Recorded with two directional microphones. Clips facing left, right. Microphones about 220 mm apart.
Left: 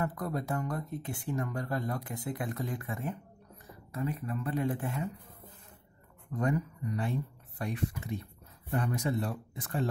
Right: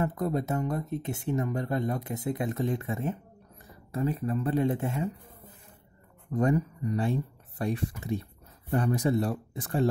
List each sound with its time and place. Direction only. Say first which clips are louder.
0.0 s speech: right 5 dB; 25° right (ahead or behind)
6.3 s speech: right 5 dB; 35° right (ahead or behind)